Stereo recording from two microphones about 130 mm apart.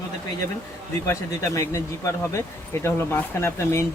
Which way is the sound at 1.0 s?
20° left (ahead or behind).